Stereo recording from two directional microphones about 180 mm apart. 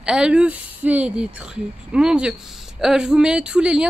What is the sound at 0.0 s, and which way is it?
Speech, 5° right (ahead or behind).